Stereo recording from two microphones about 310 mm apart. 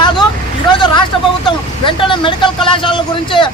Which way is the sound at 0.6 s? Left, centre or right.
Centre.